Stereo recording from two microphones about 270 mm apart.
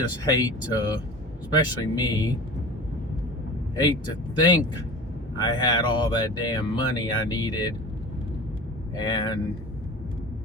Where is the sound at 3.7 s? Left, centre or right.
Centre.